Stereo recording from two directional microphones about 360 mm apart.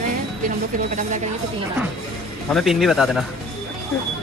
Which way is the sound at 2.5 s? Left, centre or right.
Centre.